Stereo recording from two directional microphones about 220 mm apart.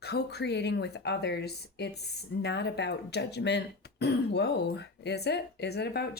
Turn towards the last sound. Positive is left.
turn(degrees=45)  # may be behind; listen again after turning